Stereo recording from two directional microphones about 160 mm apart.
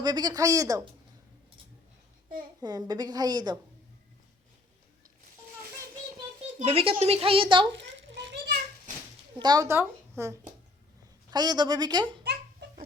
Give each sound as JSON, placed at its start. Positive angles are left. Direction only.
{"t": 0.0, "sound": "a woman's voice", "side_deg": -25}
{"t": 2.6, "sound": "a woman's voice", "side_deg": -25}
{"t": 6.6, "sound": "a woman's voice", "side_deg": -35}
{"t": 7.8, "sound": "children playing", "side_deg": -90}
{"t": 9.4, "sound": "a woman's voice", "side_deg": -25}
{"t": 11.3, "sound": "a woman's voice", "side_deg": -25}
{"t": 12.2, "sound": "babbling", "side_deg": -90}